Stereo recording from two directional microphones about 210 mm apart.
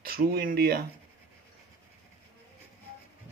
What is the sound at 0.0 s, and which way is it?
Speech, 45° right (ahead or behind).